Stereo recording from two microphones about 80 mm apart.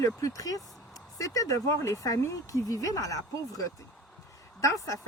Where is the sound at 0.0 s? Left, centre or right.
Left.